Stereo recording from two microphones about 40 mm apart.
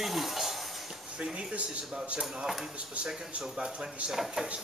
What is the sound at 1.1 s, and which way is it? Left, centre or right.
Speech, right.